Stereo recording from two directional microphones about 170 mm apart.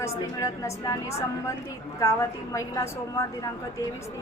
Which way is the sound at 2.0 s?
20° left (ahead or behind).